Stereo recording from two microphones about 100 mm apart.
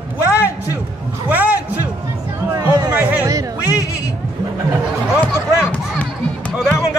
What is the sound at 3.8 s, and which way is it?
Speech, 35° left (ahead or behind).